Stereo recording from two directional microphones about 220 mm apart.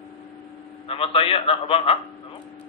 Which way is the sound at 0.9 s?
25° left (ahead or behind).